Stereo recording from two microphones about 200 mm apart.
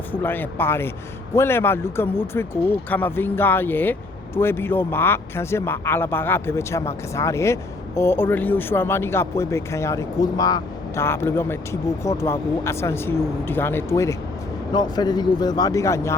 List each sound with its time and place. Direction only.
0.1 s speech: 10° left (ahead or behind)